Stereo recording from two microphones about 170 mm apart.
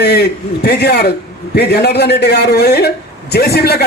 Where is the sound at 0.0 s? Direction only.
75° left (ahead or behind).